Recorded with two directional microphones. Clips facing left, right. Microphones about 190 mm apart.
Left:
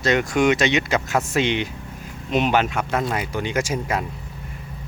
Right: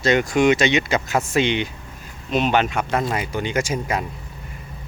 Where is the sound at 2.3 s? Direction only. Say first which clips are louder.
Even; 15° left (ahead or behind).